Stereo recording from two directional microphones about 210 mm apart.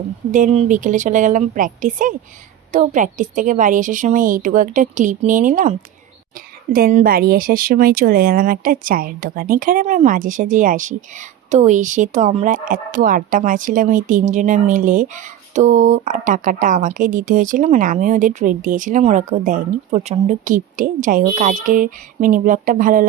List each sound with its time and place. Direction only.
0.3 s a woman's voice: 40° right (ahead or behind)